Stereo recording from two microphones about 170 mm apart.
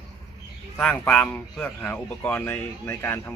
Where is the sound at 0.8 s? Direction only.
5° left (ahead or behind).